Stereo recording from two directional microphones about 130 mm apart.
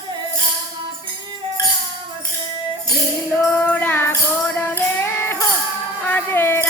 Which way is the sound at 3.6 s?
15° left (ahead or behind).